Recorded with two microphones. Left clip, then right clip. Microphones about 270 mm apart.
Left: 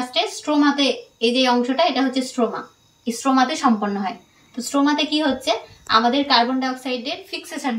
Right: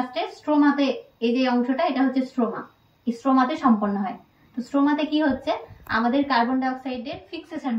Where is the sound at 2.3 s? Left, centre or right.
Centre.